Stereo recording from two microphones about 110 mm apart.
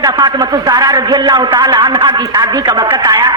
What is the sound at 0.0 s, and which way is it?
A man's voice, 40° right (ahead or behind).